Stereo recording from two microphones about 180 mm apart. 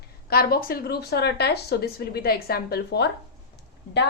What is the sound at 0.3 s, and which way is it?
A woman's voice, 60° left (ahead or behind).